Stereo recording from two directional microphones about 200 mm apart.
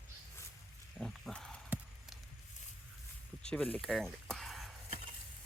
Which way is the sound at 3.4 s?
5° left (ahead or behind).